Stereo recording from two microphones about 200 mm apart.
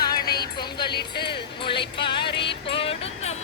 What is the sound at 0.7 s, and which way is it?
Music, 25° left (ahead or behind).